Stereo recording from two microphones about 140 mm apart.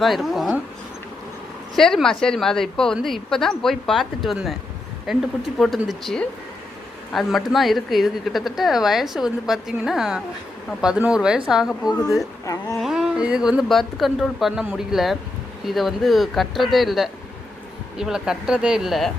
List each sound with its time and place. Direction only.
0.0 s speech: centre (ahead or behind)
1.7 s speech: 5° left (ahead or behind)
12.5 s speech: 25° left (ahead or behind)
12.8 s speech: 5° right (ahead or behind)